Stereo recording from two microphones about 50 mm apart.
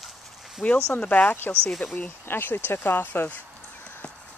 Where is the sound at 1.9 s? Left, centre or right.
Left.